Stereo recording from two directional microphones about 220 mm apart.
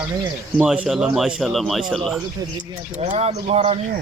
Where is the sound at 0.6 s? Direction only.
5° right (ahead or behind).